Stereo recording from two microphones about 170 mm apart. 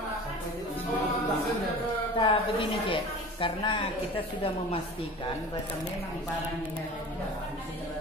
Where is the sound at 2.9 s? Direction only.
30° left (ahead or behind).